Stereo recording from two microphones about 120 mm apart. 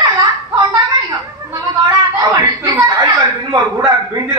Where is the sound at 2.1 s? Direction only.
35° right (ahead or behind).